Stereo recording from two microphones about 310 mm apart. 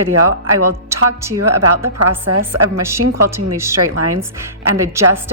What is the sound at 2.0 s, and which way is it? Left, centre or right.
Speech, right.